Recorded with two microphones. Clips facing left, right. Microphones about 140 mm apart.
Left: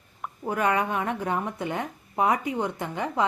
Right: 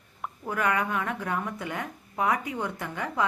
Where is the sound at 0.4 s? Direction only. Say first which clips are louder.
Left 3 dB; 25° left (ahead or behind).